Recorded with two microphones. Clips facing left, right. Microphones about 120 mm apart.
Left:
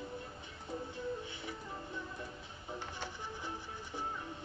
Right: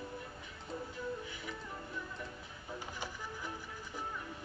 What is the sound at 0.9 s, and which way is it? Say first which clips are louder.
Music: left 1 dB; 25° left (ahead or behind).